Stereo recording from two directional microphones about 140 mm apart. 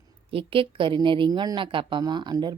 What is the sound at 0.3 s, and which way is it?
A woman's voice, 40° right (ahead or behind).